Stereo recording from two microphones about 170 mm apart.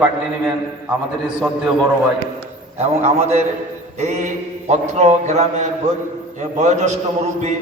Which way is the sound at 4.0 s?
45° right (ahead or behind).